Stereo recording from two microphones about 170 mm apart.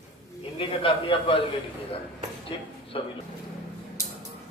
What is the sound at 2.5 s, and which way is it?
Speech, 30° left (ahead or behind).